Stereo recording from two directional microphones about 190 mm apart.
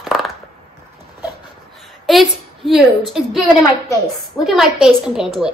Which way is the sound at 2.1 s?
Centre (ahead or behind).